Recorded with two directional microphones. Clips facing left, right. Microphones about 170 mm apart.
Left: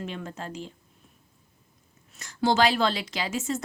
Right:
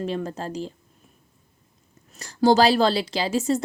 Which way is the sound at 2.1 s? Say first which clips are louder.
Right 6 dB; 35° right (ahead or behind).